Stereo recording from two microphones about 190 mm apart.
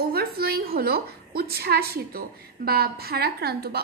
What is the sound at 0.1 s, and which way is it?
A woman's voice, 55° right (ahead or behind).